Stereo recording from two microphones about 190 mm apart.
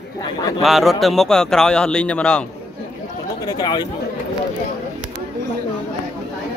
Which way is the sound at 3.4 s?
20° left (ahead or behind).